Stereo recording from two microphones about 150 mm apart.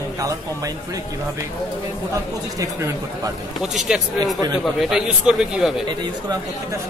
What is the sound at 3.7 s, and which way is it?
A man's voice, centre (ahead or behind).